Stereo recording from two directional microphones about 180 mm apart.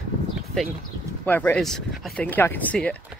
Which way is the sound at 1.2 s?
10° left (ahead or behind).